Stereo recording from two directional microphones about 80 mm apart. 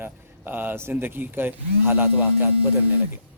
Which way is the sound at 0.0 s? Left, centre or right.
Right.